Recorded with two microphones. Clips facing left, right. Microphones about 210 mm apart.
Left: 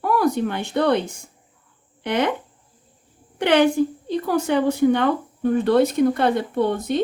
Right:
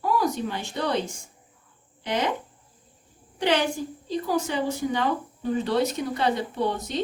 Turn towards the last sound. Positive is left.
turn(degrees=55)  # may be behind; listen again after turning